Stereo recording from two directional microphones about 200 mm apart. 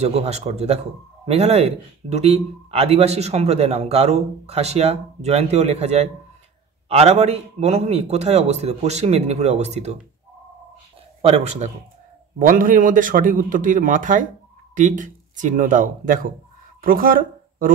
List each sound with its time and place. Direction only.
0.0 s speech: 30° right (ahead or behind)
11.2 s speech: 30° right (ahead or behind)